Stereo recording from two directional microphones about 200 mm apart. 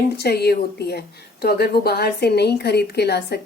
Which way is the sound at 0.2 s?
55° left (ahead or behind).